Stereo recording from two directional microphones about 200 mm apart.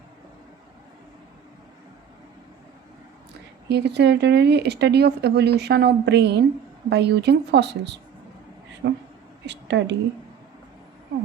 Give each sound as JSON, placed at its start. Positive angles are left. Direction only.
{"t": 3.7, "sound": "a woman's voice", "side_deg": -60}